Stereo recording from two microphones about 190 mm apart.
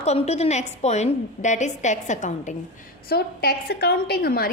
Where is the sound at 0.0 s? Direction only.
35° left (ahead or behind).